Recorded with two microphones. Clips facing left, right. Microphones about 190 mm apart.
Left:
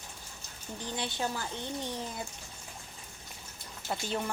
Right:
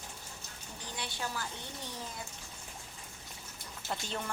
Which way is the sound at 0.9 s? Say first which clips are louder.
Left 5 dB; 25° left (ahead or behind).